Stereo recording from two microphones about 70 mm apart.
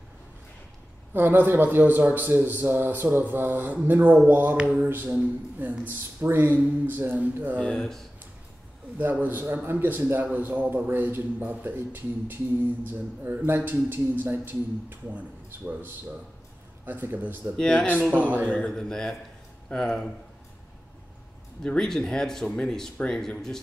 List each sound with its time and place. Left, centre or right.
1.1 s a man's voice: right
4.6 s a sound: centre
4.8 s a man's voice: right
7.5 s speech: centre
9.1 s a man's voice: right
17.6 s speech: centre
21.6 s speech: centre